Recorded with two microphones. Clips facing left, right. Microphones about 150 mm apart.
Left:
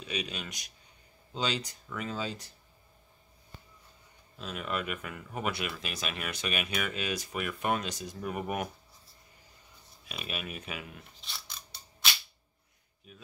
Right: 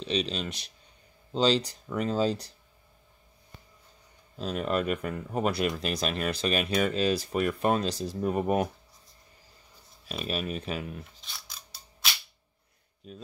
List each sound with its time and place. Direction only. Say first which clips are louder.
0.0 s speech: right 7 dB; 30° right (ahead or behind)
4.4 s speech: right 7 dB; 35° right (ahead or behind)
10.0 s speech: right 7 dB; 35° right (ahead or behind)
11.1 s scissors: even; centre (ahead or behind)